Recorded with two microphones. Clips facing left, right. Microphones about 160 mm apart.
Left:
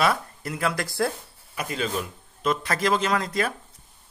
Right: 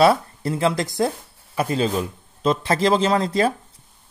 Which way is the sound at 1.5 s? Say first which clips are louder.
Right 7 dB; 30° right (ahead or behind).